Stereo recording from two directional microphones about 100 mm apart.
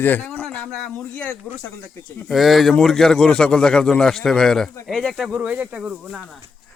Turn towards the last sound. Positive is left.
turn(degrees=-5)  # may be behind; listen again after turning